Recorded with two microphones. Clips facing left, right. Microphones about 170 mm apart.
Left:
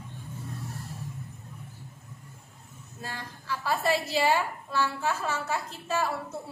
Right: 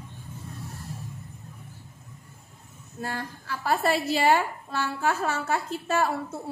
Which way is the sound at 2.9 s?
55° right (ahead or behind).